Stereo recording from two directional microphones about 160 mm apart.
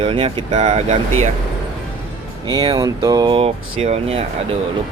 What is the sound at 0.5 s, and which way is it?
Speech, 45° right (ahead or behind).